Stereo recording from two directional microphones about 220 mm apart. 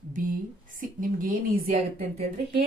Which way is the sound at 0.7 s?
40° right (ahead or behind).